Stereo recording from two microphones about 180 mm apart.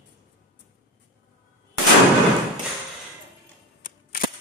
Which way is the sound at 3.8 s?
50° left (ahead or behind).